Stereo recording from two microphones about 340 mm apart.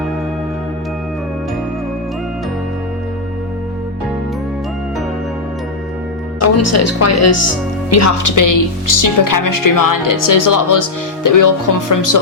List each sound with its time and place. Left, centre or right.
6.4 s a woman's voice: left